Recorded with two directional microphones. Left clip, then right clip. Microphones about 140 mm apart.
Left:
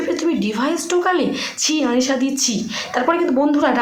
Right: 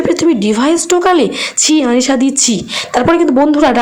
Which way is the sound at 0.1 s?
50° right (ahead or behind).